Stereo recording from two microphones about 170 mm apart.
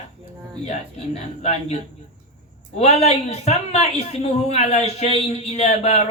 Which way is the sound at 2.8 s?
40° left (ahead or behind).